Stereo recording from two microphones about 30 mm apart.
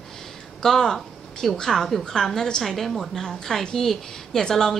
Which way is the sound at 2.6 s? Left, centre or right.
Centre.